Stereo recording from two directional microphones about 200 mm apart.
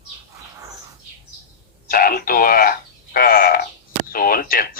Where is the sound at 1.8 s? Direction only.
45° left (ahead or behind).